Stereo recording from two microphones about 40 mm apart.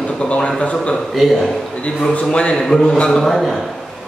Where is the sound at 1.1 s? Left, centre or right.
Centre.